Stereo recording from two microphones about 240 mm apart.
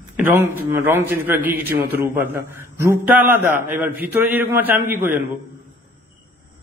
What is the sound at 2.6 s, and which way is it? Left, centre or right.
Mantra, centre.